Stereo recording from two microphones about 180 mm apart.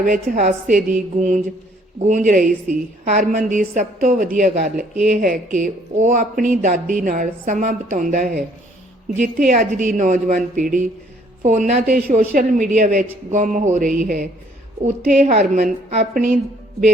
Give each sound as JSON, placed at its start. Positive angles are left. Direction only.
{"t": 0.0, "sound": "a woman's voice", "side_deg": -45}
{"t": 9.5, "sound": "a woman's voice", "side_deg": -45}
{"t": 11.9, "sound": "a woman's voice", "side_deg": -45}